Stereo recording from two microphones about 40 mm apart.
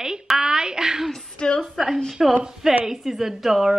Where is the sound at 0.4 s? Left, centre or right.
Centre.